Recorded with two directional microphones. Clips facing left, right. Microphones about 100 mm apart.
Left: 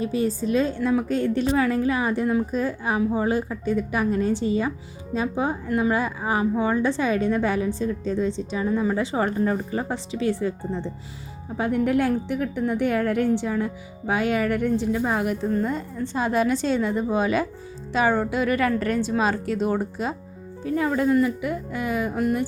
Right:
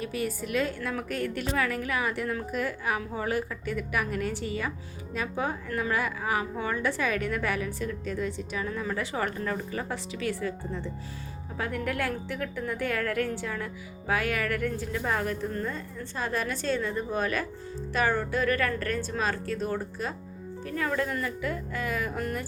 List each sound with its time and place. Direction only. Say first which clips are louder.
0.0 s a woman's voice: left 8 dB; 30° left (ahead or behind)